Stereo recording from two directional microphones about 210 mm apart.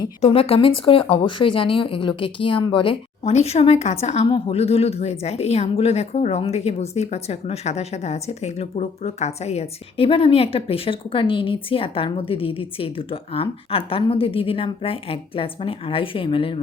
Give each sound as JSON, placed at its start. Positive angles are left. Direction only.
{"t": 0.2, "sound": "speech", "side_deg": 30}